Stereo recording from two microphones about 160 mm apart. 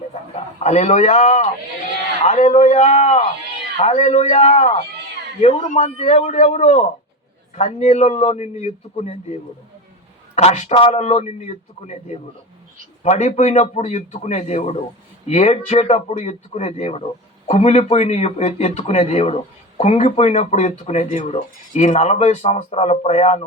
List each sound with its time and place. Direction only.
0.1 s speech: 45° left (ahead or behind)
10.3 s speech: 45° left (ahead or behind)